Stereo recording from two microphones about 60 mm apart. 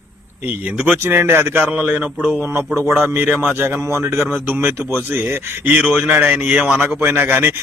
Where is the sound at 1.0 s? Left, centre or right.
Right.